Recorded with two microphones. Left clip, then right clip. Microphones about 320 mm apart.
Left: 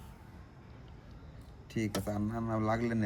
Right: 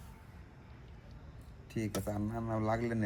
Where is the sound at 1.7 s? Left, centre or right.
Centre.